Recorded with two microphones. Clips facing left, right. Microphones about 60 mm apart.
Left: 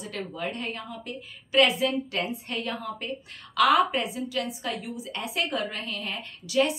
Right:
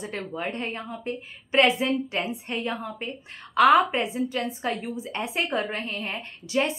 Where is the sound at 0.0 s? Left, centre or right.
Right.